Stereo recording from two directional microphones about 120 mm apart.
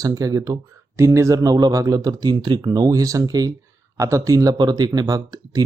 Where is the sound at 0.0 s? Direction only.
30° right (ahead or behind).